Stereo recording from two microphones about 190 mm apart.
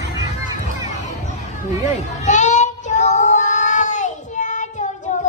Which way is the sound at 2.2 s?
40° left (ahead or behind).